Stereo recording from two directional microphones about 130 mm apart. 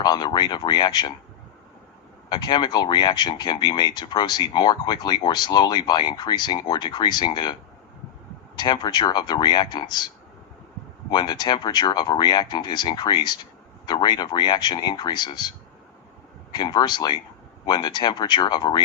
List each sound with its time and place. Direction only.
0.0 s speech: 35° left (ahead or behind)
2.3 s speech: 35° left (ahead or behind)
8.5 s speech: 35° left (ahead or behind)
11.1 s speech: 35° left (ahead or behind)